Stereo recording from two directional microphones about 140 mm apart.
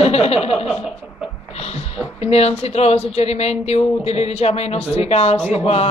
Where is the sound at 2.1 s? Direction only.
50° left (ahead or behind).